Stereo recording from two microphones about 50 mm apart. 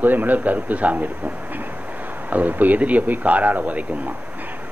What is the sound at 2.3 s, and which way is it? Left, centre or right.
A man's voice, right.